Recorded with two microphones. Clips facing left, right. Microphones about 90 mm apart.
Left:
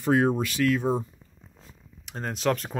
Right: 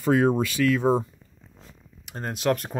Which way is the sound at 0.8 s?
90° right.